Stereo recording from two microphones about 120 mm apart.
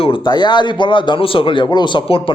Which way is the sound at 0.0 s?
40° left (ahead or behind).